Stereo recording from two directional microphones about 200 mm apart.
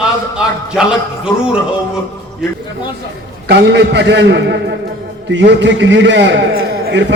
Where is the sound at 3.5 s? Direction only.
55° right (ahead or behind).